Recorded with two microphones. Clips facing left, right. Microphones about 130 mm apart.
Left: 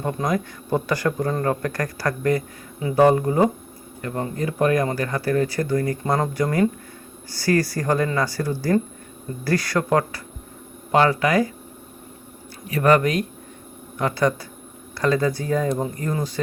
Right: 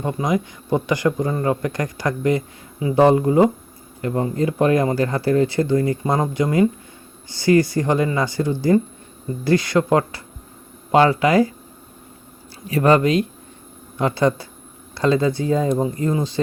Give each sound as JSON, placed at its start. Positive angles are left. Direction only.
{"t": 0.0, "sound": "speech", "side_deg": -10}
{"t": 6.0, "sound": "speech", "side_deg": -15}
{"t": 12.6, "sound": "speech", "side_deg": -30}